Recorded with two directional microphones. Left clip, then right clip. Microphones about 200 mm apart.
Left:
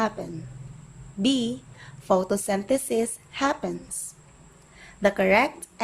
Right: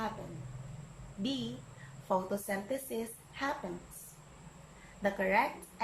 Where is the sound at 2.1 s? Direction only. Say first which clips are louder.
Left 11 dB; 55° left (ahead or behind).